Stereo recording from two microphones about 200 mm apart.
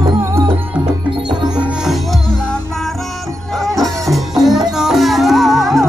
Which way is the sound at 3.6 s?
Centre (ahead or behind).